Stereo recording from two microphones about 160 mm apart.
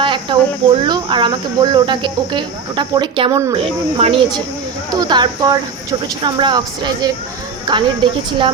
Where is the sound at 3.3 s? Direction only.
20° right (ahead or behind).